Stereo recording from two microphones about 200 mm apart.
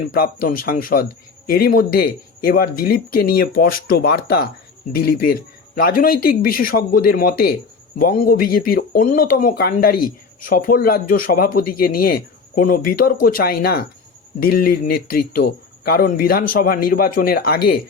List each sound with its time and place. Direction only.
0.1 s speech: 45° left (ahead or behind)